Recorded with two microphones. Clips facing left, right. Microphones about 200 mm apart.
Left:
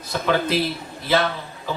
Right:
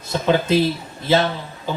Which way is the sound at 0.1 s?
25° right (ahead or behind).